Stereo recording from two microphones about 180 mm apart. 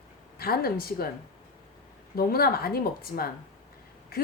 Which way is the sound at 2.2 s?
55° left (ahead or behind).